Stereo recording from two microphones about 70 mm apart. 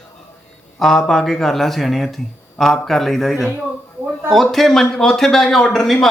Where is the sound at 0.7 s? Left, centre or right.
Centre.